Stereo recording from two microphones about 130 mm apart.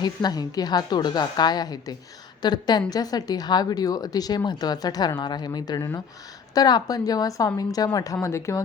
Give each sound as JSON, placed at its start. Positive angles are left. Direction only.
{"t": 0.0, "sound": "a woman's voice", "side_deg": 30}